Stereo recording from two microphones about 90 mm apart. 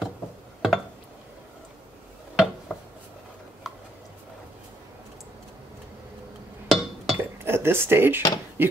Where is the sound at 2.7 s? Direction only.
5° left (ahead or behind).